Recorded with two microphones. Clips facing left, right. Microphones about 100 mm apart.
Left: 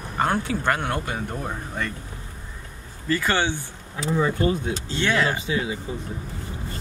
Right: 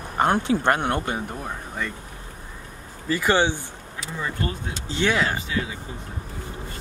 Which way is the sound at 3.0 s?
15° right (ahead or behind).